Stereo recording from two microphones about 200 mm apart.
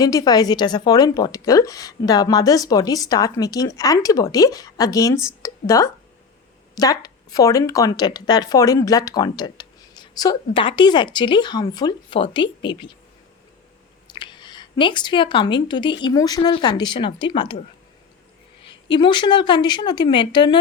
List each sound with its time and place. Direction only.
0.0 s a woman's voice: 20° left (ahead or behind)
14.1 s speech: 25° left (ahead or behind)
18.9 s speech: 25° left (ahead or behind)